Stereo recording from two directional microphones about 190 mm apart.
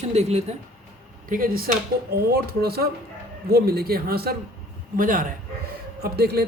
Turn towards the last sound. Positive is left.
turn(degrees=-55)  # may be behind; listen again after turning